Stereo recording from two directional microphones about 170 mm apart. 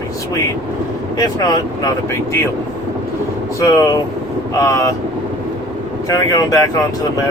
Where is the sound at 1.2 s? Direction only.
20° left (ahead or behind).